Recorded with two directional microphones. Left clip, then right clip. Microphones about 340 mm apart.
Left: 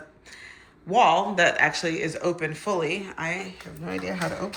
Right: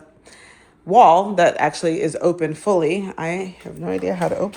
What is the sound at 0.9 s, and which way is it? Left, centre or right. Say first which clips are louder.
Speech: right 8 dB; centre.